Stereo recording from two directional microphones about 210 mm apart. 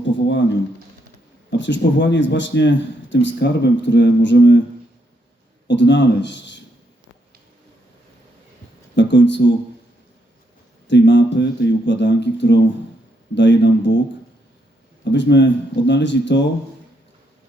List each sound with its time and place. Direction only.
0.0 s a sound: 60° left (ahead or behind)
1.5 s speech: 60° left (ahead or behind)
5.6 s speech: 55° left (ahead or behind)
9.0 s speech: 55° left (ahead or behind)
10.8 s speech: 55° left (ahead or behind)
15.1 s speech: 55° left (ahead or behind)